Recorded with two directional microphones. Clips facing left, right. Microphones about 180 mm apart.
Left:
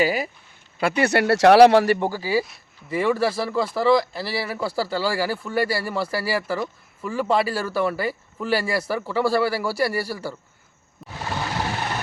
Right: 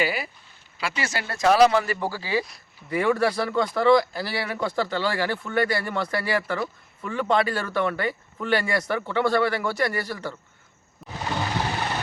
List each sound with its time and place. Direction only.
0.0 s speech: 40° left (ahead or behind)
0.8 s speech: 55° left (ahead or behind)
2.0 s a man's voice: 20° left (ahead or behind); by 11.2 s centre (ahead or behind)